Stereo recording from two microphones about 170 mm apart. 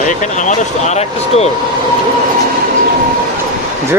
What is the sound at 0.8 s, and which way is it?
Speech, 40° left (ahead or behind).